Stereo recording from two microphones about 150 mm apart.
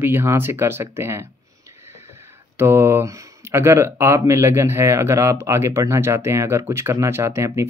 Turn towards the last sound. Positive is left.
turn(degrees=-20)  # may be behind; listen again after turning